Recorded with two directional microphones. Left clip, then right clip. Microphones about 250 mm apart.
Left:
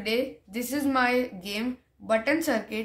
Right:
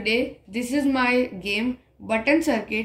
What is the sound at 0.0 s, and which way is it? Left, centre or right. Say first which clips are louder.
Speech: right 4 dB; left.